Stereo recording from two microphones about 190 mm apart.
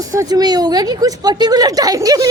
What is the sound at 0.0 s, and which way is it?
Speech, 15° right (ahead or behind).